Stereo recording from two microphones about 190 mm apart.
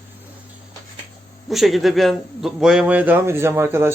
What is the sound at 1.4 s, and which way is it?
A man's voice, centre (ahead or behind).